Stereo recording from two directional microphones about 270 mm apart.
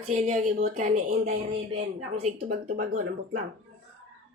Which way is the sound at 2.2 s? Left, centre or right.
Right.